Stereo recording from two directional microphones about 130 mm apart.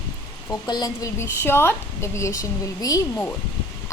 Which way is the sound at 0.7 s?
30° left (ahead or behind).